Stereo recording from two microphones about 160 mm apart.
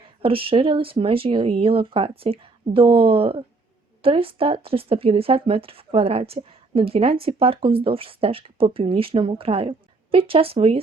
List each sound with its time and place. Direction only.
0.2 s speech: 35° right (ahead or behind)